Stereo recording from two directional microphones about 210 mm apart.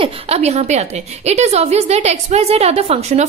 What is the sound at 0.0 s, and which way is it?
A woman's voice, 30° right (ahead or behind).